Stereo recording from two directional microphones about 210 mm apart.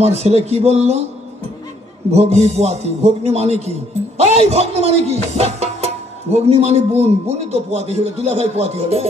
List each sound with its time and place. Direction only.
0.0 s speech: 30° right (ahead or behind)
2.0 s speech: 30° right (ahead or behind)